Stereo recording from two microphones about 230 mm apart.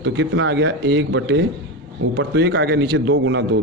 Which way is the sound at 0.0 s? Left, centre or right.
Right.